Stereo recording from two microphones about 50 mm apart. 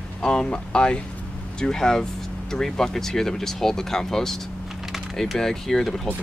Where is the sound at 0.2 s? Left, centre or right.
Centre.